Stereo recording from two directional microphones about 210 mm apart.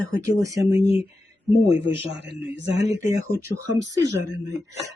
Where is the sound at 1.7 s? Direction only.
55° right (ahead or behind).